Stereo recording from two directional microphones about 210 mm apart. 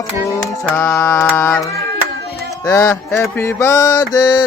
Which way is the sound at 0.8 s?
10° left (ahead or behind).